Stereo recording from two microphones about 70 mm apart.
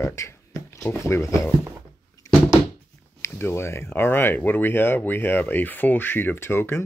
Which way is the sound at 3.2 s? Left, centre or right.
Left.